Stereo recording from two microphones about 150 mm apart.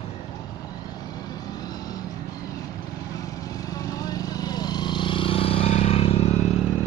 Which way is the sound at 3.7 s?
25° left (ahead or behind).